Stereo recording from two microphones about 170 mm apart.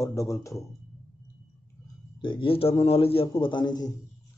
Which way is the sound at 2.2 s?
30° left (ahead or behind).